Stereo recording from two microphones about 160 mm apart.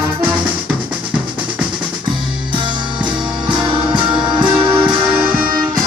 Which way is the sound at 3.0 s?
30° right (ahead or behind).